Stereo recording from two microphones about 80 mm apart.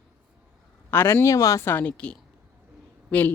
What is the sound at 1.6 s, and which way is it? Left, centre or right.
A woman's voice, left.